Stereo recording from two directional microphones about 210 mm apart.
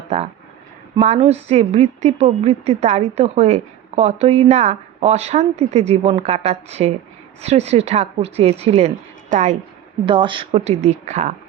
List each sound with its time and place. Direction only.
0.9 s a woman's voice: 30° right (ahead or behind)
10.1 s speech: 25° right (ahead or behind)